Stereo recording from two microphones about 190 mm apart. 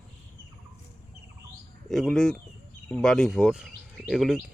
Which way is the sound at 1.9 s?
Centre (ahead or behind).